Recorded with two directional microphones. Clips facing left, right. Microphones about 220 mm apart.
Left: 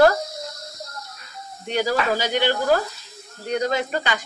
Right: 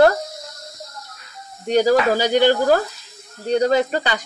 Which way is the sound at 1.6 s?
40° right (ahead or behind).